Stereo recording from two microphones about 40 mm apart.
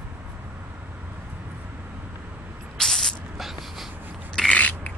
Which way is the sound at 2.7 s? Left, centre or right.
Centre.